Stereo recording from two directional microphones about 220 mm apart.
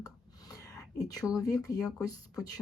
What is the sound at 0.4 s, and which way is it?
A woman's voice, 15° left (ahead or behind).